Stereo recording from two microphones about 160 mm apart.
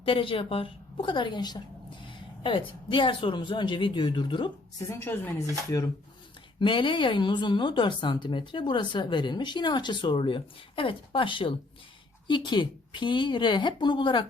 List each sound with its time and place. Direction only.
0.0 s speech: 35° left (ahead or behind)
4.9 s a woman's voice: 15° left (ahead or behind)
6.6 s a woman's voice: 30° left (ahead or behind)